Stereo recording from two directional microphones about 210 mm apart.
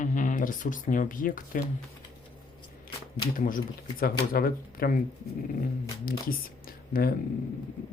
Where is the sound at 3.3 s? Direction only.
40° left (ahead or behind).